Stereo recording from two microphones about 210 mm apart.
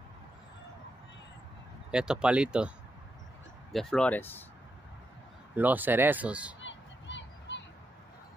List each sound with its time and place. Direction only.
1.9 s speech: 5° right (ahead or behind)
3.7 s speech: 5° left (ahead or behind)
5.6 s speech: 10° right (ahead or behind)
6.6 s a sound: 60° left (ahead or behind)